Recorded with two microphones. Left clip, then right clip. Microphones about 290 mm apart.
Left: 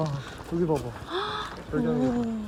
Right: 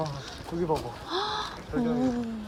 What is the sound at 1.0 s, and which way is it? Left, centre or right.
Crow, centre.